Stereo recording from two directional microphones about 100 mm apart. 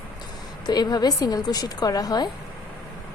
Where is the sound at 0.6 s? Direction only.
45° left (ahead or behind).